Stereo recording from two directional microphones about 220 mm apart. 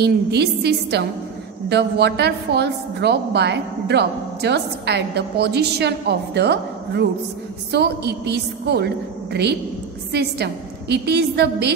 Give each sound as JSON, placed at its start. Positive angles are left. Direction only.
{"t": 0.0, "sound": "a woman's voice", "side_deg": -50}